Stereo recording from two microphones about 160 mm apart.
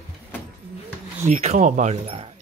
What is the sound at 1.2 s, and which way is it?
Speech, 50° right (ahead or behind).